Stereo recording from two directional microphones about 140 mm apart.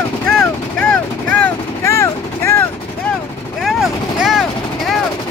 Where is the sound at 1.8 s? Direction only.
20° left (ahead or behind).